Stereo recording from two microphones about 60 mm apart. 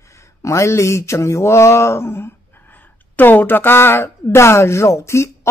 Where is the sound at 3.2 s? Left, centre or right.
Left.